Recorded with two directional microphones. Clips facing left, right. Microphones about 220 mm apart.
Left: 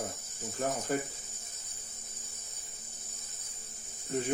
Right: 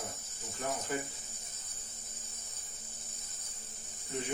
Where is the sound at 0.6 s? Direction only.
45° left (ahead or behind).